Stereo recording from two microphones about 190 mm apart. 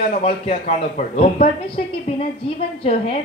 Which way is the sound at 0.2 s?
35° left (ahead or behind).